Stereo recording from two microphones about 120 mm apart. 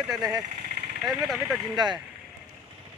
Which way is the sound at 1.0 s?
Centre (ahead or behind).